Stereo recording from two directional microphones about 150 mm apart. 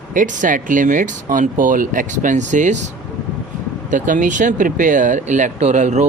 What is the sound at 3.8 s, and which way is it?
Speech, 60° right (ahead or behind).